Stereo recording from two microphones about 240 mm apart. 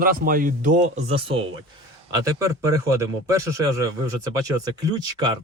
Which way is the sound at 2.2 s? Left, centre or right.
Centre.